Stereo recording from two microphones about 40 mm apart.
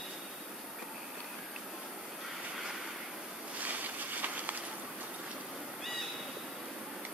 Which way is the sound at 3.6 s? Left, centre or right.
Right.